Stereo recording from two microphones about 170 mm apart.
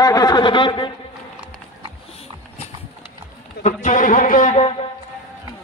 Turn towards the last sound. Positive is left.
turn(degrees=50)  # may be behind; listen again after turning